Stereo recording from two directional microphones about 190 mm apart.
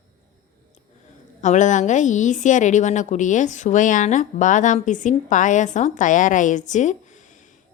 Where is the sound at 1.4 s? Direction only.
40° left (ahead or behind).